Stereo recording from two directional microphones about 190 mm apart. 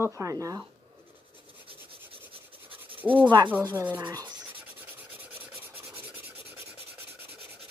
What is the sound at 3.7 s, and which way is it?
Speech, 10° right (ahead or behind).